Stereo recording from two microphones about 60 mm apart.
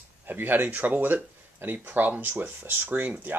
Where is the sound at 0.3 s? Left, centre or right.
Right.